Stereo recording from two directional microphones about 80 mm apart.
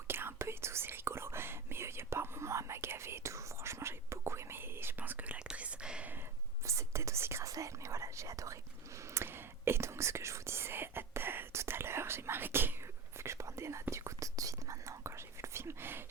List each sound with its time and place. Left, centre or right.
0.1 s whispering: right; by 6.1 s centre
6.7 s whispering: right
9.1 s whispering: right